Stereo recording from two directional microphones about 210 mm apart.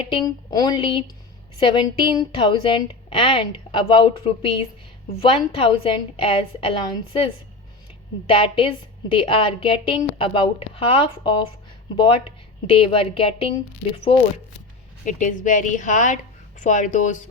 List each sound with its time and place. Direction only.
0.3 s a woman's voice: 20° left (ahead or behind)
8.3 s a woman's voice: 25° left (ahead or behind)
15.0 s a woman's voice: 35° left (ahead or behind)